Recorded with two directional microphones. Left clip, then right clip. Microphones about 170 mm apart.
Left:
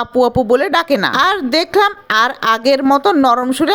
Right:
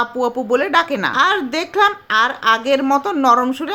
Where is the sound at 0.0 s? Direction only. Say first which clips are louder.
Left 6 dB; 40° left (ahead or behind).